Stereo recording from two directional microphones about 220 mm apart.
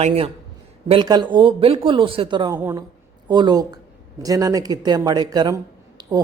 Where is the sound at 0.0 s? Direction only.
25° right (ahead or behind).